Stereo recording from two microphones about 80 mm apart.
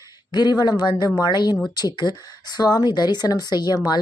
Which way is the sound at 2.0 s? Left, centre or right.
Left.